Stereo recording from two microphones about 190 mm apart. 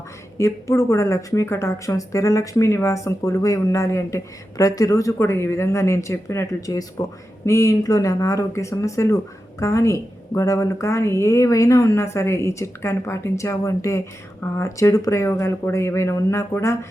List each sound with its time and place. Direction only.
0.3 s a woman's voice: 15° left (ahead or behind)